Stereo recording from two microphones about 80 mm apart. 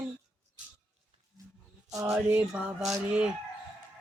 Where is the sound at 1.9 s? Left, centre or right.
Right.